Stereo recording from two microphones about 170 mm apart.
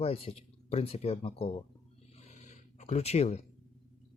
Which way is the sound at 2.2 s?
45° left (ahead or behind).